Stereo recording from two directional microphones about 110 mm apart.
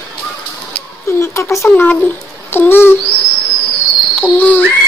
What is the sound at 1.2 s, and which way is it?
Speech, 25° left (ahead or behind).